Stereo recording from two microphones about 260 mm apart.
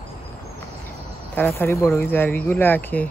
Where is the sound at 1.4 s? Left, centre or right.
Centre.